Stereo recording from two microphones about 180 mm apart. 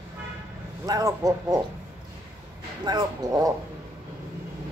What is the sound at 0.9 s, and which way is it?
Laughter, 20° right (ahead or behind).